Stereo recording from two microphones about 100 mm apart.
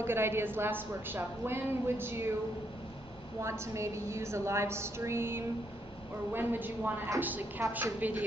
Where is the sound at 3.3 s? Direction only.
30° right (ahead or behind).